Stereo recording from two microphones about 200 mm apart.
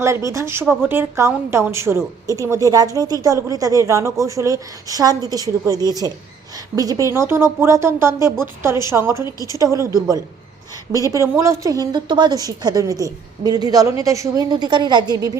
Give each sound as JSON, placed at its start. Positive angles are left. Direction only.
{"t": 0.0, "sound": "a woman's voice", "side_deg": -15}
{"t": 9.2, "sound": "a woman's voice", "side_deg": 15}
{"t": 9.7, "sound": "a woman's voice", "side_deg": -15}